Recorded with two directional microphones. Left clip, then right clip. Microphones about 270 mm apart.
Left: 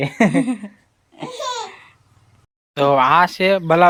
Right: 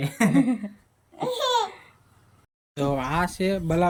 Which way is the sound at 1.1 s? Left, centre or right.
Centre.